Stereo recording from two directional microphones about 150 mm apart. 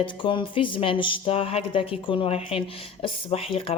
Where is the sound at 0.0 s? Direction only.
35° left (ahead or behind).